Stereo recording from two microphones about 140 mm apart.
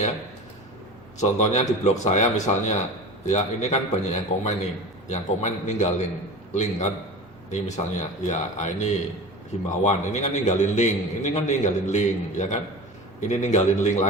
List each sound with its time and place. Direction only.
1.2 s a man's voice: 55° left (ahead or behind)